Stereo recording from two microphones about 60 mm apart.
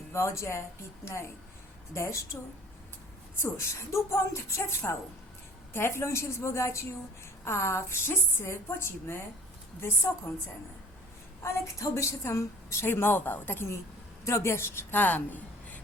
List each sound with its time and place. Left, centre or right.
0.1 s a woman's voice: left
11.4 s a woman's voice: left
12.8 s a woman's voice: left
14.3 s a woman's voice: left
14.9 s a woman's voice: left